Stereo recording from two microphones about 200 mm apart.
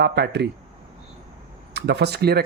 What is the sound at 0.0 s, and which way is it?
Speech, 55° right (ahead or behind).